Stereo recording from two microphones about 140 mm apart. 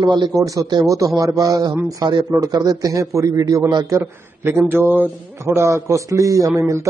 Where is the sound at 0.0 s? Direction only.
30° right (ahead or behind).